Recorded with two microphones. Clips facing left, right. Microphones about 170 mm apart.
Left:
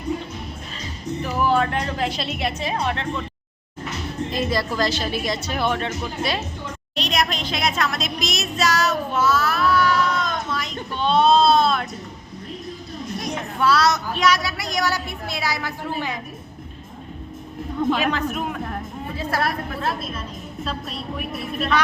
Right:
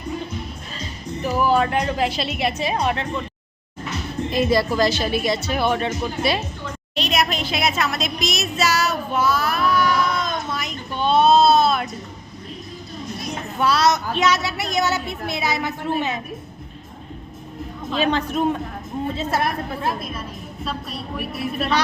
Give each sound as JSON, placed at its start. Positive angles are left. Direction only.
{"t": 1.2, "sound": "a woman's voice", "side_deg": -5}
{"t": 4.4, "sound": "a woman's voice", "side_deg": -5}
{"t": 13.6, "sound": "a woman's voice", "side_deg": -20}
{"t": 17.9, "sound": "a woman's voice", "side_deg": -30}